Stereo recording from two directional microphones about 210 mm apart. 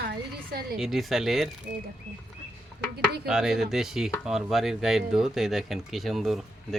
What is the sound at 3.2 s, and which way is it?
Speech, 5° right (ahead or behind).